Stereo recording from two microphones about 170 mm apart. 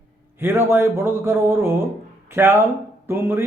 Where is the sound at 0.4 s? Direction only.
15° right (ahead or behind).